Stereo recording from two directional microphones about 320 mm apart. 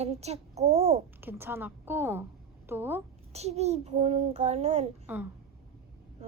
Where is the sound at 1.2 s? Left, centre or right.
Centre.